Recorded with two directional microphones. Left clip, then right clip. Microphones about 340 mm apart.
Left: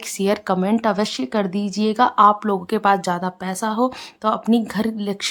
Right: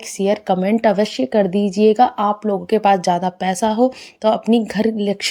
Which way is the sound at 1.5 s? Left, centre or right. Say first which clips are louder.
Right 9 dB; centre.